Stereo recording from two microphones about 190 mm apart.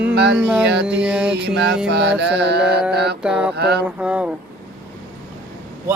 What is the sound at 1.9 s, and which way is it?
Mantra, 60° right (ahead or behind).